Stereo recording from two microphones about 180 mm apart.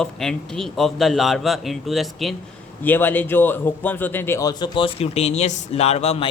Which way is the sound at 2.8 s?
10° left (ahead or behind).